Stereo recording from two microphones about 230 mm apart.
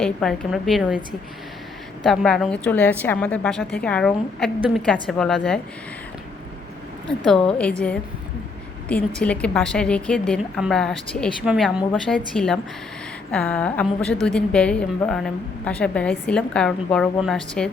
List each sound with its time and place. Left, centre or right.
0.0 s a woman's voice: centre
2.0 s a woman's voice: centre
7.3 s a woman's voice: centre
8.9 s a woman's voice: centre